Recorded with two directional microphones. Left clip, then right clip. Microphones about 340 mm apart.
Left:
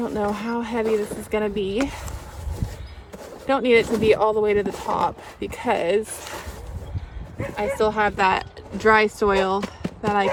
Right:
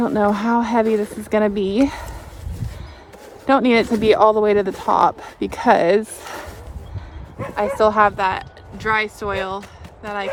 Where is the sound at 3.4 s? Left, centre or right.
Right.